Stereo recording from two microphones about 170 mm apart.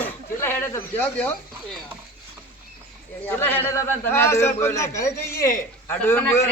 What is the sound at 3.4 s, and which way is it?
A man's voice, 10° left (ahead or behind).